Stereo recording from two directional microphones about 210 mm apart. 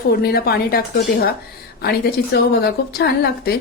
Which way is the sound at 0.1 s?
45° left (ahead or behind).